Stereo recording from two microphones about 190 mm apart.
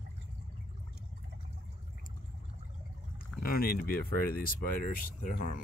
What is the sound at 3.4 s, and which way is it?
Speech, 50° left (ahead or behind).